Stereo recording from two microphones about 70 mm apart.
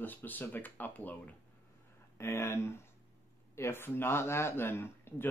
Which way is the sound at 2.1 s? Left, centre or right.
Left.